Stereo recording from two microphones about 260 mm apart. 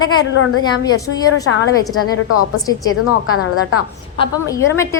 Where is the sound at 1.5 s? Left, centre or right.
Left.